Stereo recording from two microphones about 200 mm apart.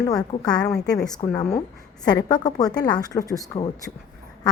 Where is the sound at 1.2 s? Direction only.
15° left (ahead or behind).